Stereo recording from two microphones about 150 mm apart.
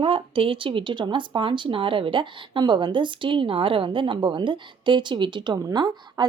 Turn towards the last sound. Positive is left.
turn(degrees=-30)  # may be behind; listen again after turning